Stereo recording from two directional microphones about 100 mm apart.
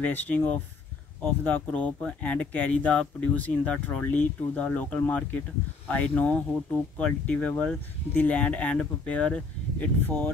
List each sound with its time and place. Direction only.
0.0 s speech: 15° left (ahead or behind)